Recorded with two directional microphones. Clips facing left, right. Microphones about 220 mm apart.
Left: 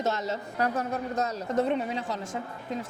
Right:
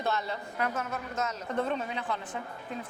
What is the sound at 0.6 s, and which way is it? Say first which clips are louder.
A woman's voice: left 5 dB; 35° left (ahead or behind).